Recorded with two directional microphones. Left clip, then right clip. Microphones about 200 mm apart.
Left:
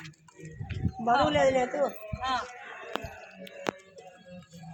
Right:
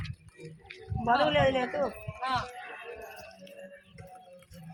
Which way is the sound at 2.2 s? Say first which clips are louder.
Left 1 dB; 15° right (ahead or behind).